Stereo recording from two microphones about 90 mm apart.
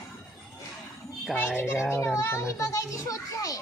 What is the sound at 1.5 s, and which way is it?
A child's voice, 25° left (ahead or behind).